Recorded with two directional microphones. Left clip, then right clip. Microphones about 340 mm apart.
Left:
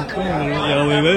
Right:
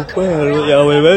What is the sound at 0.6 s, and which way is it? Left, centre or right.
Speech, centre.